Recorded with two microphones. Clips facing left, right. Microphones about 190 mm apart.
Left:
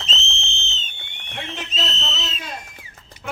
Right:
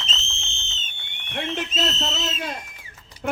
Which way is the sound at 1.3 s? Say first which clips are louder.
Right 4 dB; 45° right (ahead or behind).